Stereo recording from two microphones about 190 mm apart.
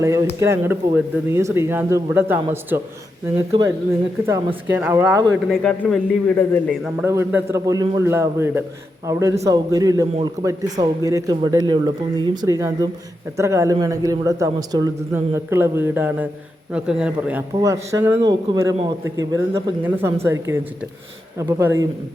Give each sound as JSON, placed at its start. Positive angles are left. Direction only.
{"t": 0.0, "sound": "a man's voice", "side_deg": -15}
{"t": 4.8, "sound": "a man's voice", "side_deg": -10}
{"t": 5.5, "sound": "a man's voice", "side_deg": 5}
{"t": 6.9, "sound": "a man's voice", "side_deg": -15}